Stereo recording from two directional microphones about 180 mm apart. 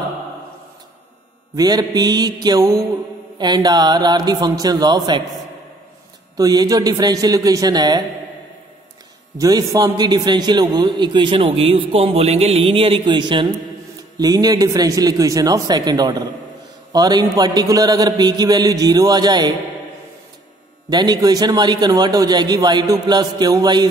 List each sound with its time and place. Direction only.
1.5 s a man's voice: 20° right (ahead or behind)
6.3 s a man's voice: 20° right (ahead or behind)
9.4 s a man's voice: 20° right (ahead or behind)
20.9 s a man's voice: 25° right (ahead or behind)